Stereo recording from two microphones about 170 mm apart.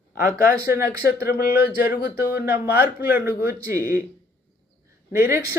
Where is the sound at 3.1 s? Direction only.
10° right (ahead or behind).